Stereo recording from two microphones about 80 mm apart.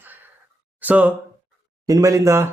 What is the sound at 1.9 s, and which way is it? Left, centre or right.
Speech, right.